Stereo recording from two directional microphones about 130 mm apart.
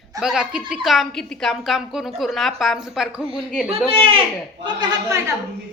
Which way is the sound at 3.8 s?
45° right (ahead or behind).